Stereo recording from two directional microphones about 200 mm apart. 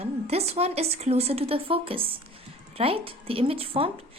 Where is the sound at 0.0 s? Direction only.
30° right (ahead or behind).